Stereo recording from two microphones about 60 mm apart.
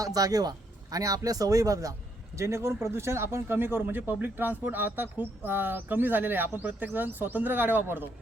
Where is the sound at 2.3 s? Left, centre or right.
Right.